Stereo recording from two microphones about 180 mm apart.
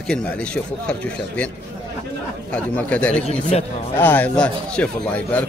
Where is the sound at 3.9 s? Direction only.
10° left (ahead or behind).